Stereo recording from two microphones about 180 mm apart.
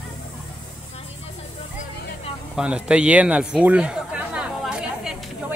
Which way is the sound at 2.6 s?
5° right (ahead or behind).